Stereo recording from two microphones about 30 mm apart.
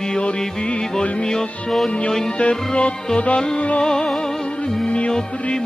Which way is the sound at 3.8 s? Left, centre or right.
Left.